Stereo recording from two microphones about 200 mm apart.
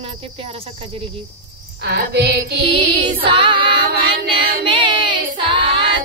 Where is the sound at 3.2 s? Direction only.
25° right (ahead or behind).